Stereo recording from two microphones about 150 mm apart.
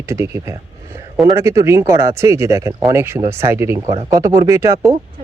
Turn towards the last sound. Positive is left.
turn(degrees=-20)  # may be behind; listen again after turning